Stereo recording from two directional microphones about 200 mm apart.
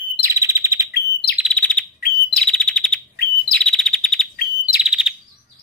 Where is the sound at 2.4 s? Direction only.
5° left (ahead or behind).